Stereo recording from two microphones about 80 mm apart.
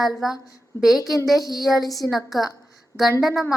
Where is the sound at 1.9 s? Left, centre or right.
Left.